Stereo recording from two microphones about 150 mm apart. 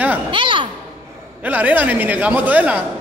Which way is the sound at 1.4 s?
10° right (ahead or behind).